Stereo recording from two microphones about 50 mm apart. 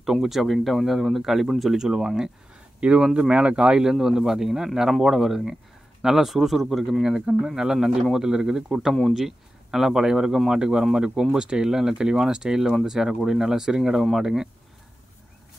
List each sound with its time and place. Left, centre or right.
0.0 s speech: centre; by 3.8 s right
3.8 s speech: centre